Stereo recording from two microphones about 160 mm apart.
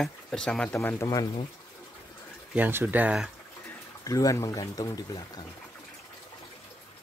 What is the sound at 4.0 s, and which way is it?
Speech, 20° left (ahead or behind).